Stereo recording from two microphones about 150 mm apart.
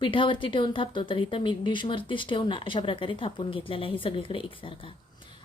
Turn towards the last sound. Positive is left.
turn(degrees=35)  # may be behind; listen again after turning